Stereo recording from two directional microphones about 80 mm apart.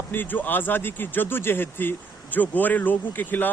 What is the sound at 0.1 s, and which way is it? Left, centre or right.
Speech, left.